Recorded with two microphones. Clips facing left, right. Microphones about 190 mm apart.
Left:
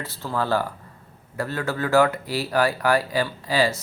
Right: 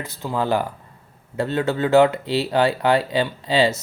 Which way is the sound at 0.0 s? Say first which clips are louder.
Right 3 dB; 15° right (ahead or behind).